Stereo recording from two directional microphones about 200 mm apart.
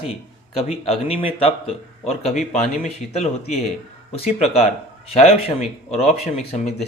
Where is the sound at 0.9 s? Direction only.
30° left (ahead or behind).